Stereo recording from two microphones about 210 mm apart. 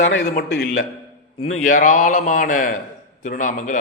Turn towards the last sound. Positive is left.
turn(degrees=40)  # may be behind; listen again after turning